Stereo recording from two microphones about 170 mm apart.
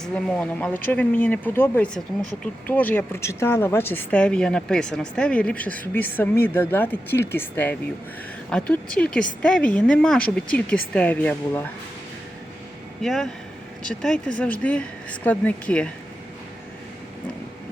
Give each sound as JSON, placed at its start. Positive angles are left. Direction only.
{"t": 0.0, "sound": "a woman's voice", "side_deg": 5}
{"t": 13.0, "sound": "a woman's voice", "side_deg": 0}